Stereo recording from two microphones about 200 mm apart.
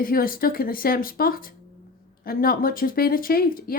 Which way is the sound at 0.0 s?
45° left (ahead or behind).